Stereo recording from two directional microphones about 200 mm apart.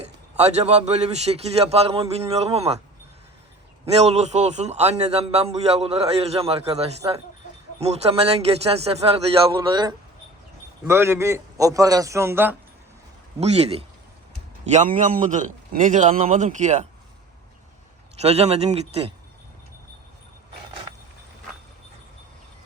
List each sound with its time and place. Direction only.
0.3 s a man's voice: 30° right (ahead or behind)
3.9 s a man's voice: 30° right (ahead or behind); by 12.5 s 10° right (ahead or behind)
13.4 s a man's voice: 30° right (ahead or behind)
18.2 s a man's voice: 30° right (ahead or behind)